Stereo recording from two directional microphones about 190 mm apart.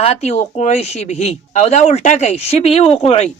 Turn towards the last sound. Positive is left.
turn(degrees=30)  # may be behind; listen again after turning